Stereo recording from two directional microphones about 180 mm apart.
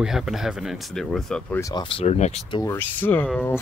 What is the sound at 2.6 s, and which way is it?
Speech, 15° left (ahead or behind).